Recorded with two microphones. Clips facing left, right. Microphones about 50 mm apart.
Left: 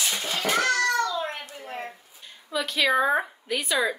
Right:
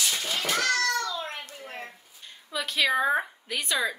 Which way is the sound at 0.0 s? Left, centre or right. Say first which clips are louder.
Left 2 dB; left.